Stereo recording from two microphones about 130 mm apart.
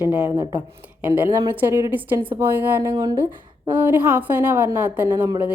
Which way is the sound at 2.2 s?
35° right (ahead or behind).